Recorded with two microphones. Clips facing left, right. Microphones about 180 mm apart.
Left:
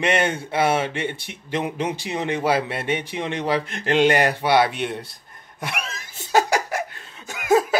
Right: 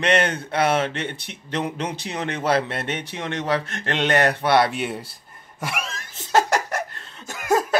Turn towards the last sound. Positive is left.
turn(degrees=0)  # may be behind; listen again after turning